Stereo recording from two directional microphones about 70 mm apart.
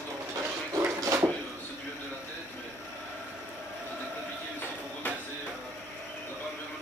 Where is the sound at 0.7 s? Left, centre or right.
Right.